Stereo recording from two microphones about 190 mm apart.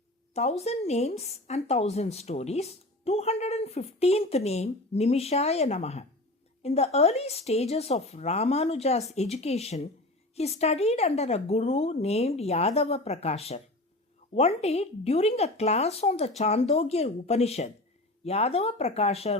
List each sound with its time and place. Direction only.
0.3 s speech: 35° left (ahead or behind)